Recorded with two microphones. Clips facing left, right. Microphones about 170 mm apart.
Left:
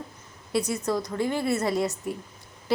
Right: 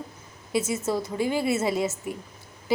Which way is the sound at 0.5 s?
5° right (ahead or behind).